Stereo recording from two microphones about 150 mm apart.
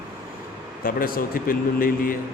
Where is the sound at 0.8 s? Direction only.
75° left (ahead or behind).